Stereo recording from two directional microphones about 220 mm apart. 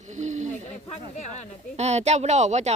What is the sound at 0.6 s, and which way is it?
Speech, 30° left (ahead or behind).